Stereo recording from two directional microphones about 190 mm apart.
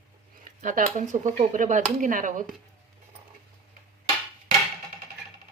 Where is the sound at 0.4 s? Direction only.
45° right (ahead or behind).